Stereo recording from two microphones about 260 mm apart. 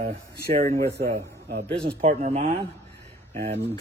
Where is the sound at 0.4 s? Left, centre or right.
Right.